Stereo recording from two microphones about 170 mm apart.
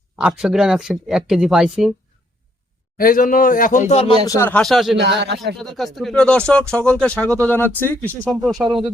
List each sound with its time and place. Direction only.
0.2 s speech: 5° right (ahead or behind)
3.0 s speech: 55° left (ahead or behind); by 4.2 s 35° left (ahead or behind)
4.4 s speech: 10° left (ahead or behind)
4.9 s a man's voice: 80° right
5.5 s speech: centre (ahead or behind)